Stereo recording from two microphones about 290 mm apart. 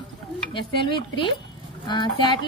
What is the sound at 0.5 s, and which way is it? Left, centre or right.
A woman's voice, centre.